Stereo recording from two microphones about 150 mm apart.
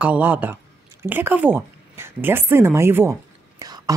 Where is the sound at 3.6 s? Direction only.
25° right (ahead or behind).